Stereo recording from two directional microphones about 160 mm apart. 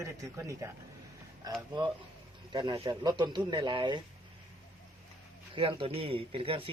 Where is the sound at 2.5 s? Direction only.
30° right (ahead or behind).